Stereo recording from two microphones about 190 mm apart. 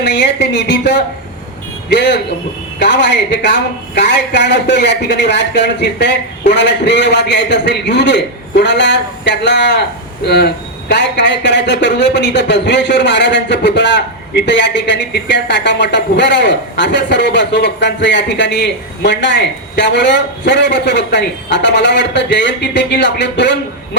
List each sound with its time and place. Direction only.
0.0 s speech: 65° left (ahead or behind)